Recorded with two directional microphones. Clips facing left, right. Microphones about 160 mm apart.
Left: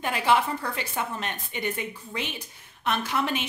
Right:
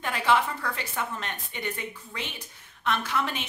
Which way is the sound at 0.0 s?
15° left (ahead or behind).